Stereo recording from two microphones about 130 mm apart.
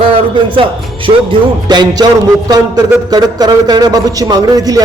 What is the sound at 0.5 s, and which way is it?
A man's voice, 40° right (ahead or behind).